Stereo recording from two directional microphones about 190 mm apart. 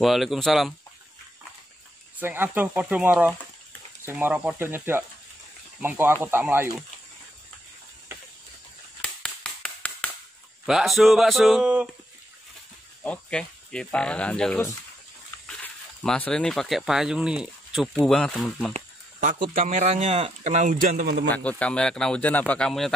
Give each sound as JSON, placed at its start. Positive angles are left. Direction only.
{"t": 0.0, "sound": "speech", "side_deg": 0}
{"t": 2.1, "sound": "speech", "side_deg": -10}
{"t": 9.0, "sound": "tap", "side_deg": 5}
{"t": 10.7, "sound": "speech", "side_deg": 0}
{"t": 13.0, "sound": "speech", "side_deg": 5}
{"t": 18.7, "sound": "speech", "side_deg": -45}
{"t": 19.7, "sound": "speech", "side_deg": -35}
{"t": 20.8, "sound": "a man's voice", "side_deg": -50}
{"t": 21.3, "sound": "speech", "side_deg": 5}